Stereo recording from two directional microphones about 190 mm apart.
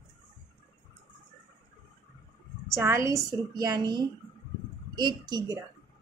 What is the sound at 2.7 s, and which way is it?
A woman's voice, 15° right (ahead or behind).